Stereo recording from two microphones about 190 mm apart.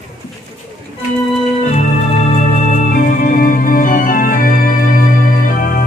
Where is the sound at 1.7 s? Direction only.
35° left (ahead or behind).